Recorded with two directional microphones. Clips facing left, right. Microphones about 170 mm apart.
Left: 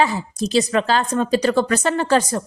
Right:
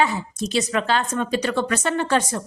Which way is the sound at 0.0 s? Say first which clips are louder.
Left 2 dB; 35° left (ahead or behind).